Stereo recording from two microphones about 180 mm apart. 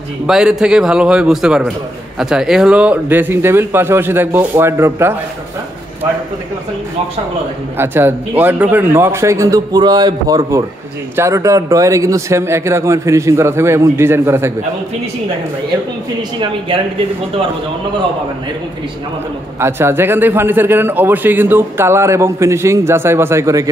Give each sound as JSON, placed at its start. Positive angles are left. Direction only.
{"t": 0.3, "sound": "a man's voice", "side_deg": -5}
{"t": 7.7, "sound": "a man's voice", "side_deg": -10}
{"t": 16.3, "sound": "speech", "side_deg": -30}
{"t": 19.6, "sound": "a man's voice", "side_deg": -15}